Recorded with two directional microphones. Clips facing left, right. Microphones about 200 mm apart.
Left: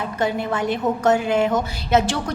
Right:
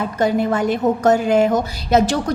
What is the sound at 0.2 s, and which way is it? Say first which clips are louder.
A woman's voice: right 5 dB; 40° right (ahead or behind).